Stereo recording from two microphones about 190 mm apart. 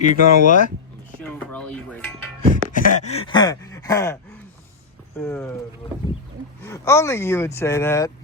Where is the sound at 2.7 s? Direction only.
40° left (ahead or behind); by 4.1 s 20° left (ahead or behind).